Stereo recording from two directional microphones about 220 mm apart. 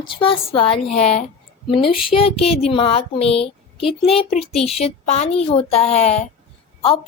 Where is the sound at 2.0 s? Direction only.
25° left (ahead or behind).